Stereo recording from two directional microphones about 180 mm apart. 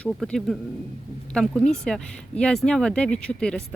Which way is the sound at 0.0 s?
5° left (ahead or behind).